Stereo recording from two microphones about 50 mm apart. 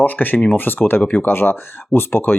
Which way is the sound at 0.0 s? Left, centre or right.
Left.